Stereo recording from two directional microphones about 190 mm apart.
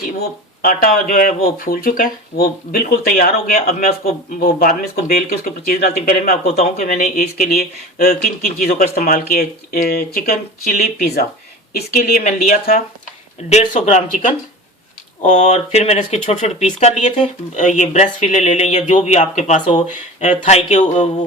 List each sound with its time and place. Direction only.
0.2 s speech: 50° left (ahead or behind)
6.4 s speech: 35° left (ahead or behind)
13.5 s speech: 35° left (ahead or behind)